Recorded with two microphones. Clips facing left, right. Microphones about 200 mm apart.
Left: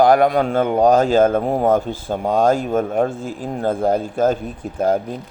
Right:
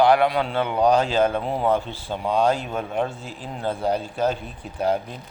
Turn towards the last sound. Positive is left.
turn(degrees=45)  # may be behind; listen again after turning